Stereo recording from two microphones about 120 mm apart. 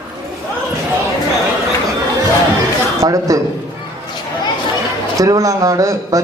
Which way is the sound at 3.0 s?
30° right (ahead or behind).